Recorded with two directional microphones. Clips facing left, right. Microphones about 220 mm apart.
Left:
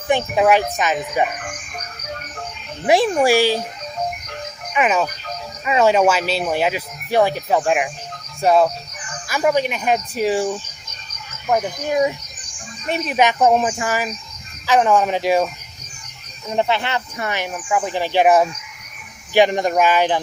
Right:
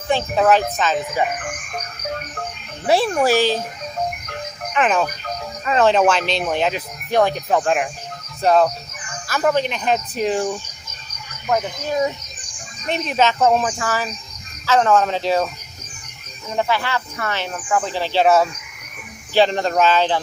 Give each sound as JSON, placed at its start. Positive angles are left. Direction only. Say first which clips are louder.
{"t": 0.1, "sound": "speech", "louder": "left 1 dB", "side_deg": 10}
{"t": 2.8, "sound": "speech", "louder": "left 2 dB", "side_deg": 15}
{"t": 4.7, "sound": "speech", "louder": "even", "side_deg": 10}
{"t": 11.4, "sound": "speech", "louder": "left 1 dB", "side_deg": 20}
{"t": 16.6, "sound": "speech", "louder": "left 1 dB", "side_deg": 20}